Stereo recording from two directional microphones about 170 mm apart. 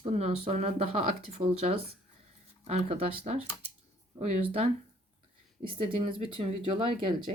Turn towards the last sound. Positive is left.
turn(degrees=-30)  # may be behind; listen again after turning